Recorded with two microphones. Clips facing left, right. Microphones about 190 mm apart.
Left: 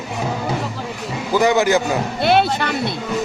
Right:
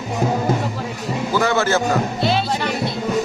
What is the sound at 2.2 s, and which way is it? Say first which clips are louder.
Music: left 4 dB; 60° left (ahead or behind).